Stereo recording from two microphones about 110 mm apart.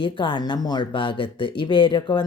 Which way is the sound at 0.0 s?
45° left (ahead or behind).